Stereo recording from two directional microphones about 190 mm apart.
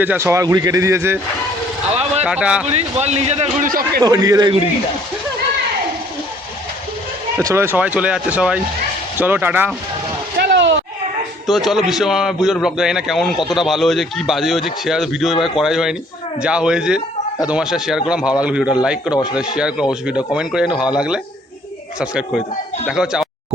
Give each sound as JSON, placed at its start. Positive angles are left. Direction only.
{"t": 0.0, "sound": "speech", "side_deg": -10}
{"t": 1.9, "sound": "a sound", "side_deg": -35}
{"t": 2.2, "sound": "a man's voice", "side_deg": -5}
{"t": 2.6, "sound": "speech", "side_deg": -35}
{"t": 3.7, "sound": "a man's voice", "side_deg": -50}
{"t": 4.0, "sound": "a man's voice", "side_deg": -20}
{"t": 7.3, "sound": "speech", "side_deg": -15}
{"t": 10.3, "sound": "a sound", "side_deg": -60}
{"t": 11.4, "sound": "a man's voice", "side_deg": 0}
{"t": 19.1, "sound": "speech", "side_deg": 20}
{"t": 19.4, "sound": "a man's voice", "side_deg": -5}
{"t": 22.9, "sound": "speech", "side_deg": -5}